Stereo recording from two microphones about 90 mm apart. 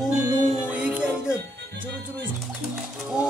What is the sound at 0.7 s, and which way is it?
Music, 15° right (ahead or behind).